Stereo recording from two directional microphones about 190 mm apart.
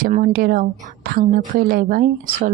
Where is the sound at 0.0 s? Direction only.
45° right (ahead or behind).